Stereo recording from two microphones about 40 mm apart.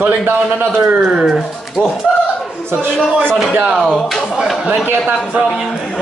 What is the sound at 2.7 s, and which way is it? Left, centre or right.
Speech, right.